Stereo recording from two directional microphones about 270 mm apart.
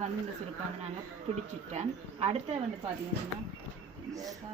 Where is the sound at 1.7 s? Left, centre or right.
Right.